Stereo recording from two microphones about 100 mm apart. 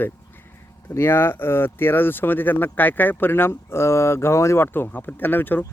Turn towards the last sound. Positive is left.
turn(degrees=20)  # may be behind; listen again after turning